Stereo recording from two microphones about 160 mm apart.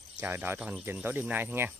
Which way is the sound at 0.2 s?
15° right (ahead or behind).